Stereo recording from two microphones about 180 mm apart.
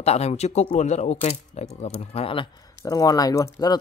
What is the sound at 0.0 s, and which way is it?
Speech, 35° left (ahead or behind).